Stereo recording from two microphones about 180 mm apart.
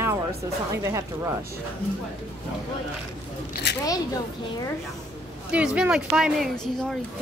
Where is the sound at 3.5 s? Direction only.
65° left (ahead or behind).